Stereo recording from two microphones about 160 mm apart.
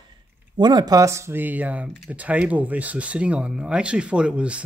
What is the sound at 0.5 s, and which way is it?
Speech, 25° right (ahead or behind).